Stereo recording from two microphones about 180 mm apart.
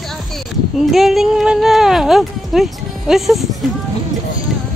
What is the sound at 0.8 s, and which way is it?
Speech, centre (ahead or behind).